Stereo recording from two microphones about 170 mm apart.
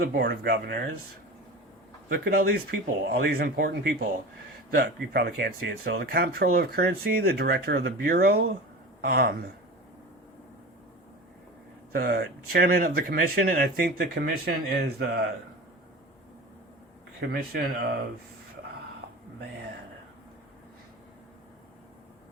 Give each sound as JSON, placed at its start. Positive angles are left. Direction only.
{"t": 0.0, "sound": "speech", "side_deg": -65}
{"t": 2.0, "sound": "speech", "side_deg": -65}
{"t": 11.9, "sound": "speech", "side_deg": -60}
{"t": 17.2, "sound": "speech", "side_deg": -65}